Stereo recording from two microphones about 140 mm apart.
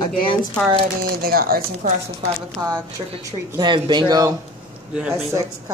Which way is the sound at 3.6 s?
30° right (ahead or behind).